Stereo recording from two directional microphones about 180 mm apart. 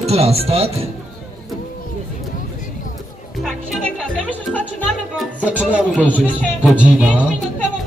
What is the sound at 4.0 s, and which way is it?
Music, 5° left (ahead or behind).